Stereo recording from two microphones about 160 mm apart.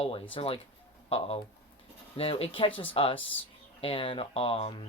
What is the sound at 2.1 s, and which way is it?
Speech, 35° left (ahead or behind).